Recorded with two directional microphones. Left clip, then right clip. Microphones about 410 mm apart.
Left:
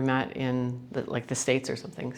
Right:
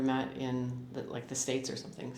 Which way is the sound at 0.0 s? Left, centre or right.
Left.